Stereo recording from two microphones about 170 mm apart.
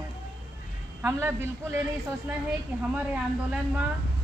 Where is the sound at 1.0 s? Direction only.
15° right (ahead or behind).